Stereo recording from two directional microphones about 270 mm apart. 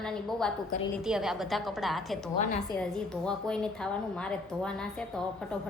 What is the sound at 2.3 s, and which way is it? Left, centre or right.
Speech, left.